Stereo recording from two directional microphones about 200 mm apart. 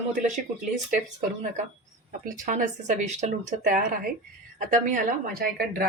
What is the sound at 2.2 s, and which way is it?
Speech, 40° right (ahead or behind).